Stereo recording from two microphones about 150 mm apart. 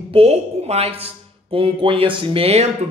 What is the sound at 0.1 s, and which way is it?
A woman's voice, 40° right (ahead or behind).